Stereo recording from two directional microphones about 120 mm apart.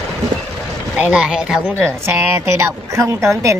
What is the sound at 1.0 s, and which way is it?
A woman's voice, 5° right (ahead or behind).